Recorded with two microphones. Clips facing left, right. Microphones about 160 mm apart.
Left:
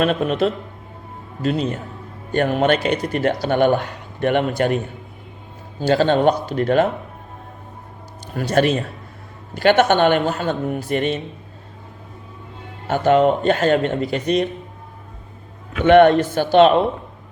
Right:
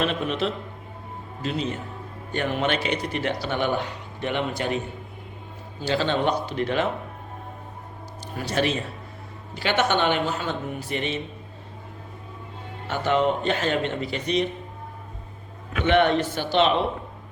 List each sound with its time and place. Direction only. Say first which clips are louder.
0.0 s speech: left 7 dB; 45° left (ahead or behind)
5.8 s speech: left 8 dB; 45° left (ahead or behind)
8.4 s speech: left 7 dB; 50° left (ahead or behind)
12.9 s speech: left 7 dB; 45° left (ahead or behind)
15.8 s speech: left 9 dB; 50° left (ahead or behind)